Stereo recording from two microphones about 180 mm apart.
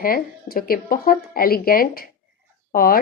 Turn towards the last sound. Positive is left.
turn(degrees=55)  # may be behind; listen again after turning